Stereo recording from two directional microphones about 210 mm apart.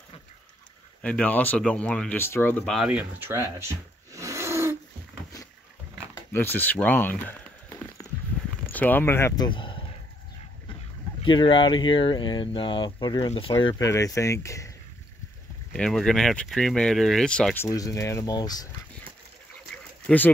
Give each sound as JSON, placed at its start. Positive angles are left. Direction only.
{"t": 1.0, "sound": "speech", "side_deg": 5}
{"t": 5.9, "sound": "a sound", "side_deg": 10}
{"t": 8.7, "sound": "speech", "side_deg": 10}
{"t": 9.5, "sound": "speech", "side_deg": 25}
{"t": 11.2, "sound": "speech", "side_deg": 25}
{"t": 15.7, "sound": "speech", "side_deg": 5}
{"t": 17.6, "sound": "speech", "side_deg": 15}